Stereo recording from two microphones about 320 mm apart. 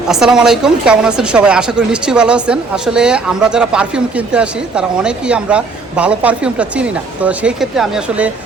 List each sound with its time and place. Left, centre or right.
0.1 s a woman's voice: centre